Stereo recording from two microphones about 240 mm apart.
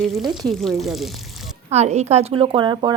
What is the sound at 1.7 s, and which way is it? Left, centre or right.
A woman's voice, right.